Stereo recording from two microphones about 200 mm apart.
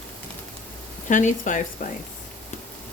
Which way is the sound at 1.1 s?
40° left (ahead or behind).